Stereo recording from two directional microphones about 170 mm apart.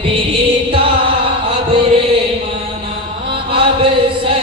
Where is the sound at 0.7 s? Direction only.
30° right (ahead or behind).